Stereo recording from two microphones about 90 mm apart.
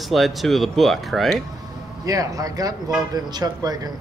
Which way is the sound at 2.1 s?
40° right (ahead or behind).